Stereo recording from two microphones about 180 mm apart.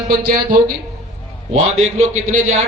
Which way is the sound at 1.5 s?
40° right (ahead or behind).